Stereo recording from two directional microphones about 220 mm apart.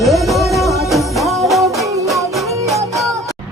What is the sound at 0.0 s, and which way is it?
Music, centre (ahead or behind).